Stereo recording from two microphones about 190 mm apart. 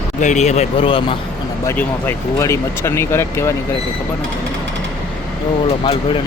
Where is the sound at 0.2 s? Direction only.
40° left (ahead or behind).